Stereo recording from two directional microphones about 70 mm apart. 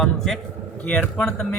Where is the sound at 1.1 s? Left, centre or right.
Centre.